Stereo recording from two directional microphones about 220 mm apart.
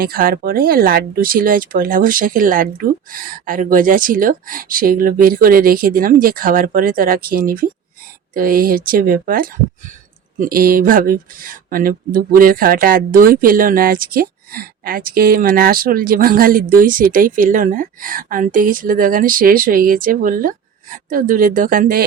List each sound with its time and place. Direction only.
0.0 s speech: 40° right (ahead or behind)